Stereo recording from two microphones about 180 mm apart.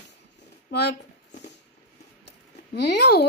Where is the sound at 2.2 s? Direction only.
65° left (ahead or behind).